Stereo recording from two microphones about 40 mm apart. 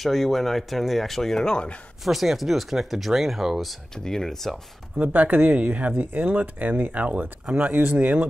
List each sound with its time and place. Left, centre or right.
0.0 s speech: centre; by 1.8 s left
2.0 s speech: centre
3.9 s speech: centre
5.0 s speech: right